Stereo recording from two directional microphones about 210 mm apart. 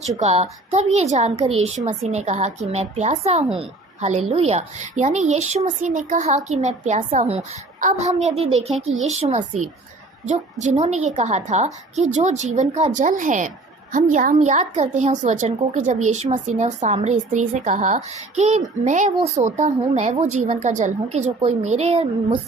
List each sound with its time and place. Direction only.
0.2 s a woman's voice: 30° right (ahead or behind)
8.9 s speech: 70° right (ahead or behind)
9.1 s speech: 35° right (ahead or behind)